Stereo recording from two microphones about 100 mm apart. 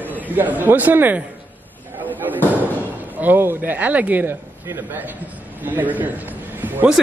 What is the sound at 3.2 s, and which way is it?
A man's voice, 20° right (ahead or behind).